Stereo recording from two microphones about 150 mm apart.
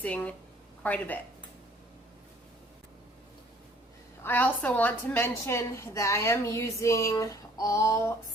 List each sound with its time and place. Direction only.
0.0 s a woman's voice: 10° left (ahead or behind)
4.2 s a woman's voice: 10° left (ahead or behind)